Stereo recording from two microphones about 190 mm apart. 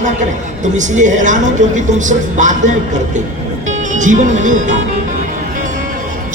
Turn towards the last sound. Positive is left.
turn(degrees=-40)  # may be behind; listen again after turning